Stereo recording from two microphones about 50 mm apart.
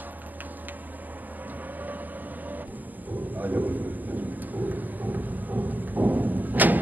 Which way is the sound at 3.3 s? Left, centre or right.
Right.